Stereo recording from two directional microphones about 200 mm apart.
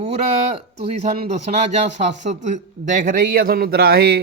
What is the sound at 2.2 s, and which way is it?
A man's voice, 35° right (ahead or behind).